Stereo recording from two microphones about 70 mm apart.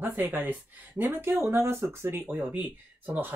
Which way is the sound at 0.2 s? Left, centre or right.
Right.